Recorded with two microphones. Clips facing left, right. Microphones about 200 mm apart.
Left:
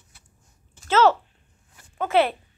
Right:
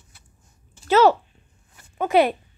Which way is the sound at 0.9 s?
15° right (ahead or behind).